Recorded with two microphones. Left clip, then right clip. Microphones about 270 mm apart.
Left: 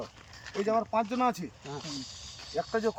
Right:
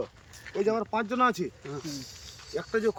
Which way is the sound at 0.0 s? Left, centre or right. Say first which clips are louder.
Right 5 dB; left.